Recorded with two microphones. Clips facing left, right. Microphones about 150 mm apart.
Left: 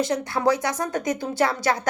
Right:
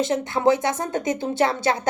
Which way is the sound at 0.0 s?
25° right (ahead or behind).